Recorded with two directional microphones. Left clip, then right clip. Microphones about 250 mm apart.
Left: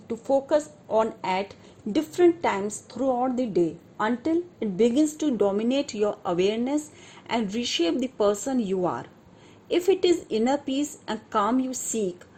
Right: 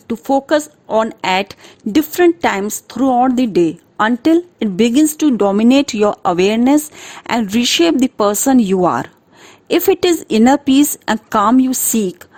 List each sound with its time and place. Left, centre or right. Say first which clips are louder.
0.1 s speech: right 8 dB; right